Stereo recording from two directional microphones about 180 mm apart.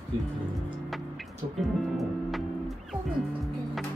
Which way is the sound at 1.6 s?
Centre (ahead or behind).